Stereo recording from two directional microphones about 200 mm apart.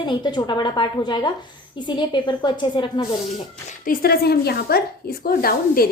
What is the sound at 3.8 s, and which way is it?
A woman's voice, 50° left (ahead or behind).